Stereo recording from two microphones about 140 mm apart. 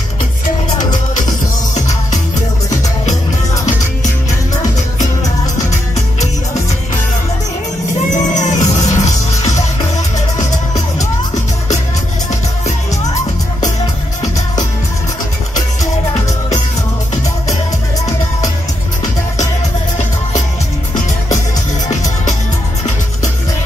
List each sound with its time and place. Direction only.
5.2 s music: 25° left (ahead or behind)
8.1 s music: 60° left (ahead or behind)